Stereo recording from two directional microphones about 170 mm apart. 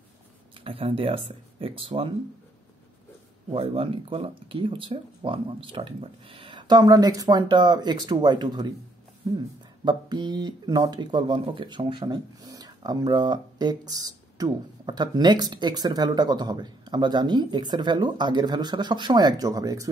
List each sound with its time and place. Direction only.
0.6 s speech: 35° right (ahead or behind)
3.4 s speech: 35° right (ahead or behind)